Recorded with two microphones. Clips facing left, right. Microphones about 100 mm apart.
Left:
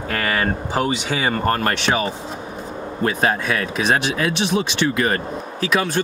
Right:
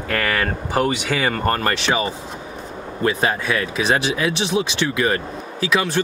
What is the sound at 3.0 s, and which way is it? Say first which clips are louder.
Speech: even; 35° left (ahead or behind).